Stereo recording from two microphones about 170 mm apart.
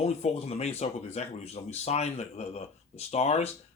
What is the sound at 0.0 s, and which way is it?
Speech, 35° left (ahead or behind).